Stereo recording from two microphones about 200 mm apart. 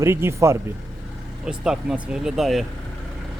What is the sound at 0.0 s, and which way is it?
Speech, 10° right (ahead or behind).